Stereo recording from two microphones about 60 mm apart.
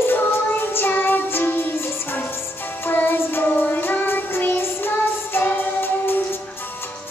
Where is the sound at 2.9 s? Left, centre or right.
Left.